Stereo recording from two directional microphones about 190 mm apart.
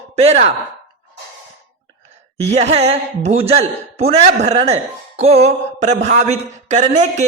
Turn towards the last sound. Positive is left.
turn(degrees=-40)  # may be behind; listen again after turning